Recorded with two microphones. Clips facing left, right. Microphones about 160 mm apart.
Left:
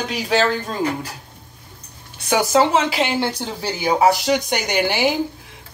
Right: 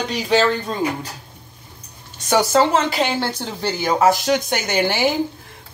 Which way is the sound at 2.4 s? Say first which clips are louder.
Even; 10° left (ahead or behind).